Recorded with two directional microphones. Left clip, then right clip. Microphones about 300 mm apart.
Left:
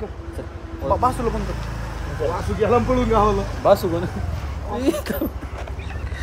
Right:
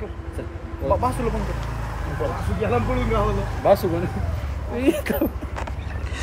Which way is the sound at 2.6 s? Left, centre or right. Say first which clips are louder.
Left 5 dB; left.